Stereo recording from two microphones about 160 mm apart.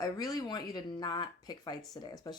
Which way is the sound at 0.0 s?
25° left (ahead or behind).